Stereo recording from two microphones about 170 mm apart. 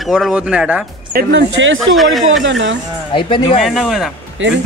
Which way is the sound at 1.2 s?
90° right.